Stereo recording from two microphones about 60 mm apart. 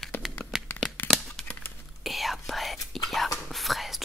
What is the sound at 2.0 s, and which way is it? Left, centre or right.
Whispering, centre.